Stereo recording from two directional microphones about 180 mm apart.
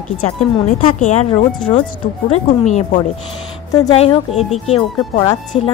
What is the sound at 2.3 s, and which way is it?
A woman's voice, 40° left (ahead or behind).